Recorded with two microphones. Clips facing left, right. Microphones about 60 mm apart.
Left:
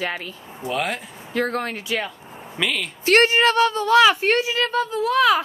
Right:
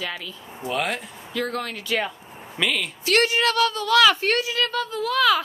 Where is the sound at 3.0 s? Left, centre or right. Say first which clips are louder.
Left 5 dB; left.